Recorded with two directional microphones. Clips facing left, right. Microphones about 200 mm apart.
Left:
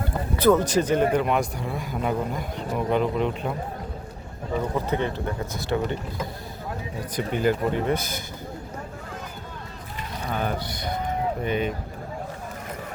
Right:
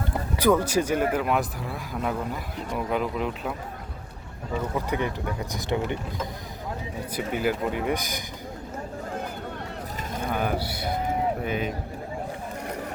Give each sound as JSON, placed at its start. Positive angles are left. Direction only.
{"t": 0.3, "sound": "speech", "side_deg": -10}
{"t": 4.7, "sound": "speech", "side_deg": -15}
{"t": 7.2, "sound": "speech", "side_deg": -5}
{"t": 10.2, "sound": "speech", "side_deg": -10}